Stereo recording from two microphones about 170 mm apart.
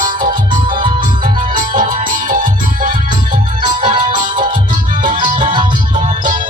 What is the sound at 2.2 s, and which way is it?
Music, 50° right (ahead or behind).